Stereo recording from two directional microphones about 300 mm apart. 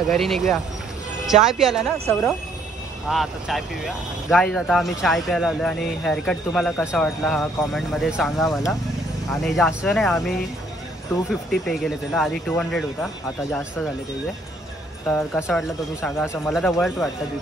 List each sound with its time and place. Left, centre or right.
0.1 s speech: centre
15.0 s speech: centre